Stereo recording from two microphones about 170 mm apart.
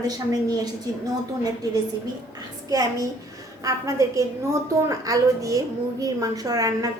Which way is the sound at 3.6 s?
20° right (ahead or behind).